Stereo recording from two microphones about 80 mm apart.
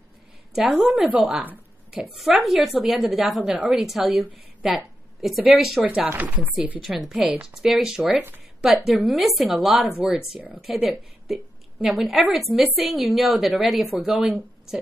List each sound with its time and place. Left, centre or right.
0.6 s a woman's voice: centre
2.0 s a woman's voice: centre
5.9 s chopping: centre
6.8 s a woman's voice: centre